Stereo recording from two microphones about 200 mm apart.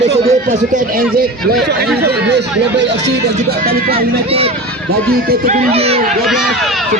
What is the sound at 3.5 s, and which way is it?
Speech, 50° right (ahead or behind).